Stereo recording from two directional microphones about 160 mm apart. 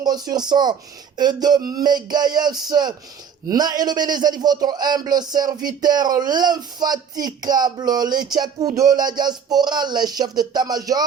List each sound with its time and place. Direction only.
0.0 s speech: 25° right (ahead or behind)